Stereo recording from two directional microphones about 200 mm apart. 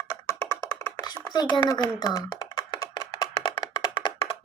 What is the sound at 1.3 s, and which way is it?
Computer keyboard, 20° left (ahead or behind).